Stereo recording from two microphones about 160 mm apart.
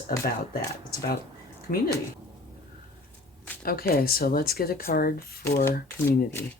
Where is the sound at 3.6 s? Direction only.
70° left (ahead or behind).